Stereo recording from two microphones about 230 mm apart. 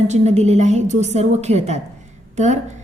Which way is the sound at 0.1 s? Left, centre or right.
Right.